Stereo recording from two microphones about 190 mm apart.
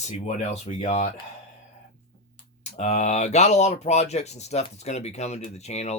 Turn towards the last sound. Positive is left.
turn(degrees=35)  # may be behind; listen again after turning